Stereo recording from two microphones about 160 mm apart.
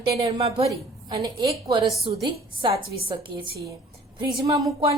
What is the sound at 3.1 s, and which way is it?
A woman's voice, 30° right (ahead or behind).